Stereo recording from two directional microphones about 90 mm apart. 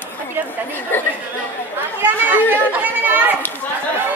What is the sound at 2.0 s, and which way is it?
Chatter, 25° right (ahead or behind).